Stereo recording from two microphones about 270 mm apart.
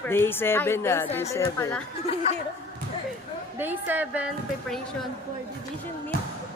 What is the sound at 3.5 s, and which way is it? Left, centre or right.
Speech, centre.